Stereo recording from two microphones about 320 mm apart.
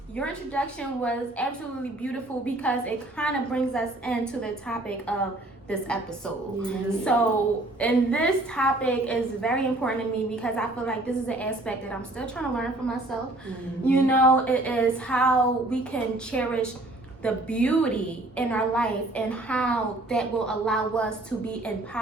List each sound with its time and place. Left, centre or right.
0.2 s a woman's voice: centre